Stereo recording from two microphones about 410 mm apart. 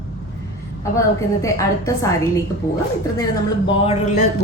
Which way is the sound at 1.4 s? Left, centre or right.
Centre.